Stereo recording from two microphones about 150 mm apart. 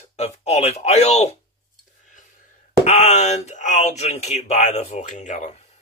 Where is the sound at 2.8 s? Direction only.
50° left (ahead or behind).